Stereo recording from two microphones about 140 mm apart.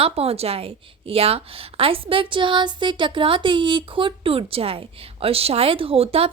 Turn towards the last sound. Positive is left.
turn(degrees=-45)  # may be behind; listen again after turning